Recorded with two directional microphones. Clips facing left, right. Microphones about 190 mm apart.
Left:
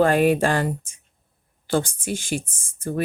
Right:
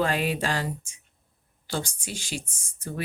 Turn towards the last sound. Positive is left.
turn(degrees=50)  # may be behind; listen again after turning